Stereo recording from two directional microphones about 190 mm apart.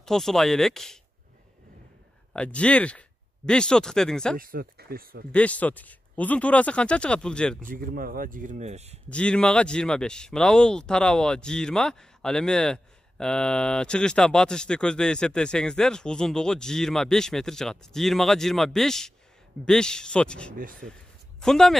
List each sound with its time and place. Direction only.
0.0 s speech: 5° left (ahead or behind)
2.3 s speech: 5° left (ahead or behind)
4.4 s speech: 50° right (ahead or behind)
5.3 s speech: 5° left (ahead or behind)
7.6 s speech: 50° right (ahead or behind)
9.1 s speech: 5° left (ahead or behind)